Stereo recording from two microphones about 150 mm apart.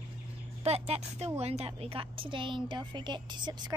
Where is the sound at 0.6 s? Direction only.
45° right (ahead or behind).